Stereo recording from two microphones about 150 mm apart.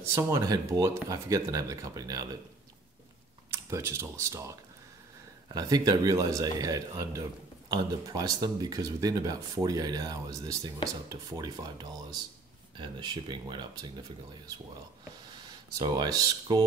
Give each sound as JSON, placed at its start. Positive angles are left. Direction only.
{"t": 0.0, "sound": "speech", "side_deg": -15}
{"t": 3.4, "sound": "speech", "side_deg": -20}
{"t": 15.8, "sound": "speech", "side_deg": -25}